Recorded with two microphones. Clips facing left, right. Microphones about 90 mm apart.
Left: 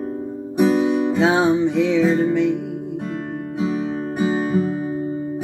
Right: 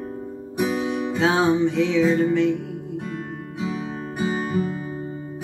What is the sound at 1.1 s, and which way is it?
Music, 5° left (ahead or behind).